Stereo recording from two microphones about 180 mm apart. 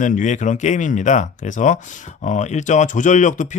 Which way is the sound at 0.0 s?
45° left (ahead or behind).